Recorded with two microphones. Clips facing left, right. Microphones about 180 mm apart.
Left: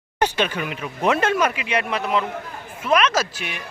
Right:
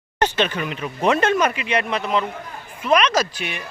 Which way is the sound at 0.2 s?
10° left (ahead or behind).